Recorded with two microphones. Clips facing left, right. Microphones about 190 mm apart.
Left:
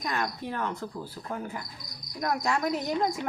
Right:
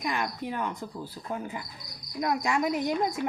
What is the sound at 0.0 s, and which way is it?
Speech, 10° right (ahead or behind).